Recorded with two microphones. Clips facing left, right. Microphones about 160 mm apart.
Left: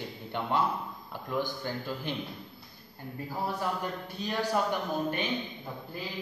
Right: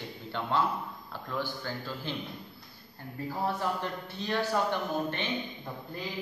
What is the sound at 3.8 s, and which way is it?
A man's voice, 10° left (ahead or behind).